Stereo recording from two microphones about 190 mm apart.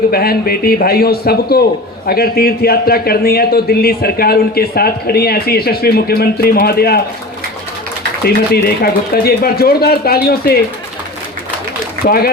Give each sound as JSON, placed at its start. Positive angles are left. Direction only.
{"t": 0.1, "sound": "a man's voice", "side_deg": 55}
{"t": 8.2, "sound": "a man's voice", "side_deg": 55}
{"t": 12.0, "sound": "speech", "side_deg": 55}